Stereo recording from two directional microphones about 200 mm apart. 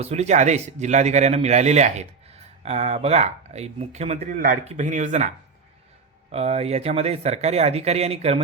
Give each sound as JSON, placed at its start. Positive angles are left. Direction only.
{"t": 0.0, "sound": "speech", "side_deg": -35}
{"t": 6.3, "sound": "speech", "side_deg": -30}